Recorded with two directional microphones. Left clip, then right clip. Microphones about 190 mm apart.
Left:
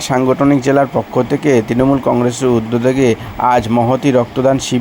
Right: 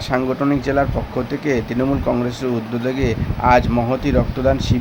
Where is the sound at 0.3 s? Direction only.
25° left (ahead or behind).